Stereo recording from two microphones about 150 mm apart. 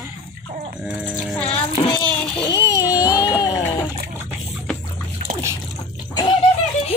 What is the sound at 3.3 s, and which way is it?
Music, 20° left (ahead or behind).